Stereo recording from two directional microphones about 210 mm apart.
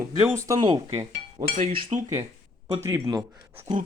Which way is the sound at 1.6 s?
35° right (ahead or behind).